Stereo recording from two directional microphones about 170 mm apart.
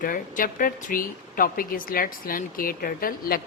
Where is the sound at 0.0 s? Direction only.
55° left (ahead or behind).